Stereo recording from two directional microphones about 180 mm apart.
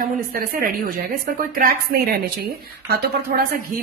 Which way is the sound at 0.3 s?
55° right (ahead or behind).